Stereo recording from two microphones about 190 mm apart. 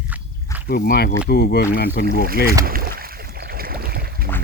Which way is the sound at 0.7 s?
50° left (ahead or behind).